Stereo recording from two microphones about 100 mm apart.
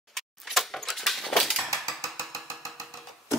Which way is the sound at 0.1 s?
Centre (ahead or behind).